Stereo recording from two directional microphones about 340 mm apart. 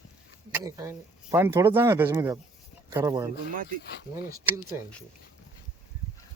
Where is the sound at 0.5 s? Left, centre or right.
Centre.